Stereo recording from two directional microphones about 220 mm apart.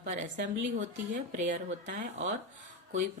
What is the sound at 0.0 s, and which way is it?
A woman's voice, 35° right (ahead or behind).